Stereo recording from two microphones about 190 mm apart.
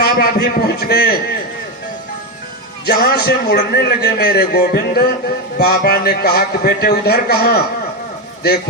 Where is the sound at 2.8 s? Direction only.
55° left (ahead or behind).